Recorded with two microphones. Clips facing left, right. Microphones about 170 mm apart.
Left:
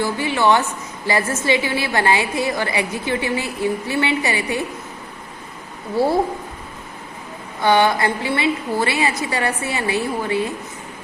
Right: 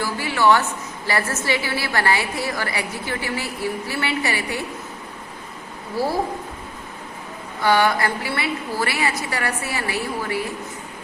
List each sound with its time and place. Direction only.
0.0 s a sound: 20° left (ahead or behind)
1.0 s a woman's voice: 15° left (ahead or behind)
6.0 s a woman's voice: 25° left (ahead or behind)
7.6 s a woman's voice: 20° left (ahead or behind)